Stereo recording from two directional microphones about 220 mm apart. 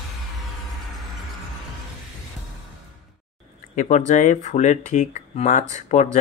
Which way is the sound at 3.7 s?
35° left (ahead or behind).